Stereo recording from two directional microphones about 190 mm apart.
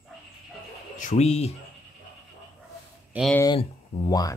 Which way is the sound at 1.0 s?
35° left (ahead or behind).